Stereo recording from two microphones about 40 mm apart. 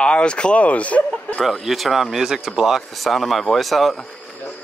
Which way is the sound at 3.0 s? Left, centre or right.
Centre.